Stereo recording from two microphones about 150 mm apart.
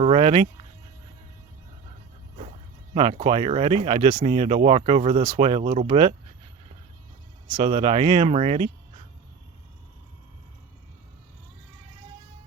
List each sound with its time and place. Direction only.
0.0 s speech: 40° right (ahead or behind)
2.9 s speech: 40° right (ahead or behind)
7.6 s speech: 35° right (ahead or behind)